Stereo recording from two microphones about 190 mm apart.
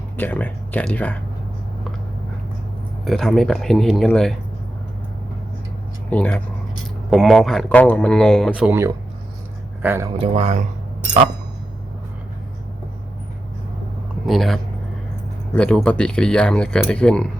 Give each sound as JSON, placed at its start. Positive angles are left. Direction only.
{"t": 0.2, "sound": "speech", "side_deg": 10}
{"t": 3.0, "sound": "speech", "side_deg": 0}
{"t": 6.1, "sound": "speech", "side_deg": 10}
{"t": 10.2, "sound": "speech", "side_deg": -35}
{"t": 14.3, "sound": "speech", "side_deg": 0}